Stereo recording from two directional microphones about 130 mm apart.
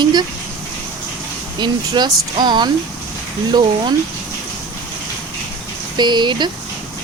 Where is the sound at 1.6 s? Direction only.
35° right (ahead or behind).